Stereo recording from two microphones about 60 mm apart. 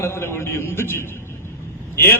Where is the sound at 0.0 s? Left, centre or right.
Left.